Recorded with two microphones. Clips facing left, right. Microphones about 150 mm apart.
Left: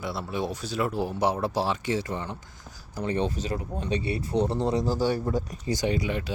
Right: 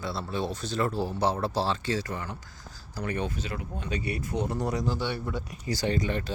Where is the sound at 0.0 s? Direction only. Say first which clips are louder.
Left 1 dB; 15° left (ahead or behind); by 5.5 s 40° left (ahead or behind).